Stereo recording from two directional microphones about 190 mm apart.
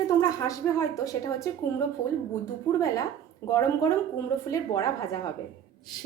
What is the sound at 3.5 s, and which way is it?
A woman's voice, 15° left (ahead or behind).